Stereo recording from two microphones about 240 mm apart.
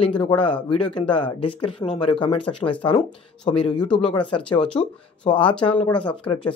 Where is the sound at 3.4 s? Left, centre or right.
Centre.